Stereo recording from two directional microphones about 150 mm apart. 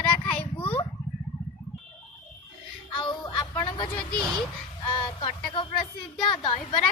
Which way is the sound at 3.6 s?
35° left (ahead or behind).